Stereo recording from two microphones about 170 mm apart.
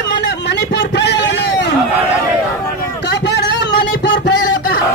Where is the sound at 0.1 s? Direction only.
90° left.